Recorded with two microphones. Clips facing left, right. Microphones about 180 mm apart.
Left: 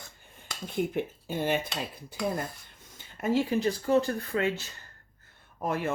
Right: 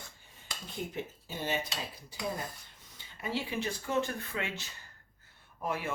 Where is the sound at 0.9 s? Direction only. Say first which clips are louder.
Left 8 dB; 55° left (ahead or behind).